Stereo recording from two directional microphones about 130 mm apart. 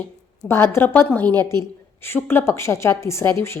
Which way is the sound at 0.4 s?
20° left (ahead or behind).